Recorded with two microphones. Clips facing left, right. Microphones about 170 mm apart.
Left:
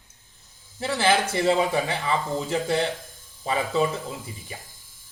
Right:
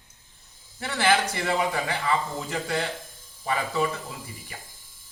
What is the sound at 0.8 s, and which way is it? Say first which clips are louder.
Speech: left 1 dB; 20° left (ahead or behind).